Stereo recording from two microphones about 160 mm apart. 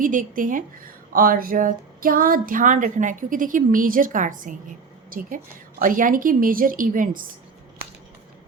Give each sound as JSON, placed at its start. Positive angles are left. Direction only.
{"t": 0.0, "sound": "speech", "side_deg": -55}